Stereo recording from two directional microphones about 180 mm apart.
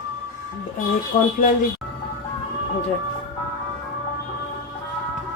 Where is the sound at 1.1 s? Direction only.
45° left (ahead or behind).